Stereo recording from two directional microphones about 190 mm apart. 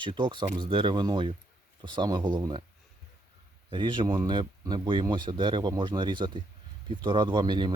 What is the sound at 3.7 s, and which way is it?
Speech, 25° right (ahead or behind).